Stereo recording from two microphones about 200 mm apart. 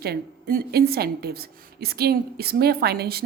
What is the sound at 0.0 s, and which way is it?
A woman's voice, 50° right (ahead or behind).